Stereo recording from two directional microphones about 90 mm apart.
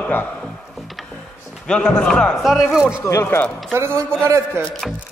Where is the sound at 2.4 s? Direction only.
5° right (ahead or behind).